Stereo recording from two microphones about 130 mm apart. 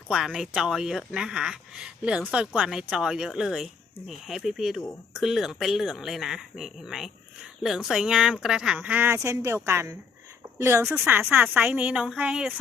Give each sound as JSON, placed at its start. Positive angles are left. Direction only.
{"t": 0.1, "sound": "speech", "side_deg": -5}